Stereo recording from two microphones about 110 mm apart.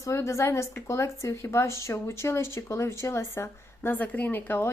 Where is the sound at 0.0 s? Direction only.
25° left (ahead or behind).